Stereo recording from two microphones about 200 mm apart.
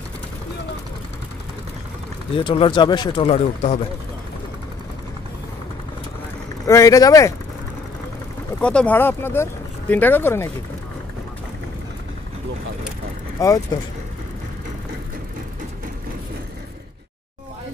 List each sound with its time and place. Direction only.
2.3 s speech: 25° left (ahead or behind)
6.7 s speech: 15° left (ahead or behind)
8.5 s speech: 5° left (ahead or behind)
13.4 s speech: 15° left (ahead or behind)